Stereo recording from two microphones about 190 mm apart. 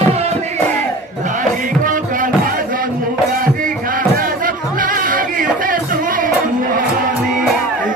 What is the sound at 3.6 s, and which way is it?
Music, 45° right (ahead or behind).